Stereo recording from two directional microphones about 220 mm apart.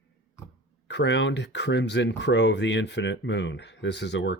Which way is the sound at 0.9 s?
50° left (ahead or behind).